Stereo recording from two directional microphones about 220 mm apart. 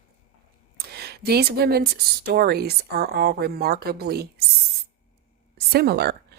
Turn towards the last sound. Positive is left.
turn(degrees=-45)  # may be behind; listen again after turning